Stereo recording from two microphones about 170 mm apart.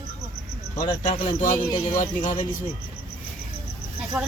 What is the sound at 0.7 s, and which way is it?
A man's voice, 45° left (ahead or behind).